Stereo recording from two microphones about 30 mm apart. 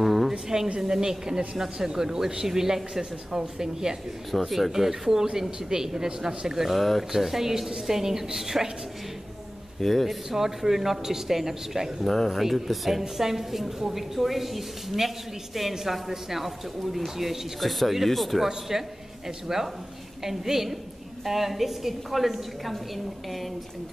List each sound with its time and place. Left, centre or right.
0.0 s a sound: centre
0.7 s a woman's voice: centre
4.4 s a woman's voice: centre
6.7 s a woman's voice: centre
9.8 s speech: centre
10.3 s a woman's voice: centre
18.7 s a woman's voice: centre